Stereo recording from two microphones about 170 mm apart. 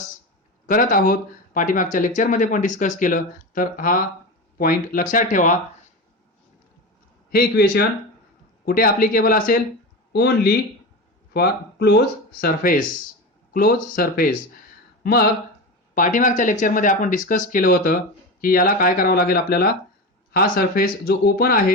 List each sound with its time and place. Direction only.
0.7 s speech: 55° left (ahead or behind)
7.3 s speech: 65° left (ahead or behind)
10.1 s speech: 70° left (ahead or behind)
12.4 s speech: 60° left (ahead or behind)
16.0 s speech: 50° left (ahead or behind)